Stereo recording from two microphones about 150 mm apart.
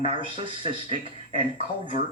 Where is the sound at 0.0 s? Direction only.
35° right (ahead or behind).